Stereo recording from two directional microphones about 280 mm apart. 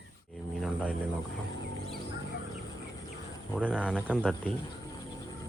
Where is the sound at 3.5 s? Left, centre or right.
Centre.